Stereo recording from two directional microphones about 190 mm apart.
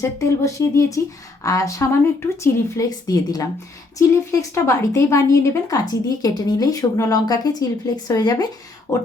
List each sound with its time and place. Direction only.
0.2 s speech: 15° left (ahead or behind)